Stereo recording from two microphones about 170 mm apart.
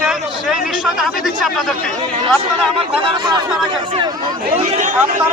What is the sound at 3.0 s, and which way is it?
Speech, 25° right (ahead or behind).